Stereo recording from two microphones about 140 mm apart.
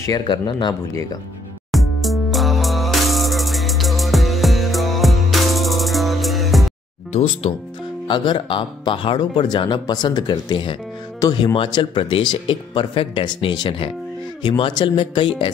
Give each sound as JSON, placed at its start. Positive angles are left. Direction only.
{"t": 0.0, "sound": "speech", "side_deg": 30}
{"t": 1.7, "sound": "music", "side_deg": 0}
{"t": 7.1, "sound": "speech", "side_deg": 50}
{"t": 8.1, "sound": "speech", "side_deg": 35}